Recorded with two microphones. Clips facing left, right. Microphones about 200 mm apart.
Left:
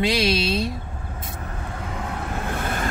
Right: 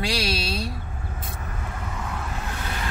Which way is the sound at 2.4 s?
50° left (ahead or behind).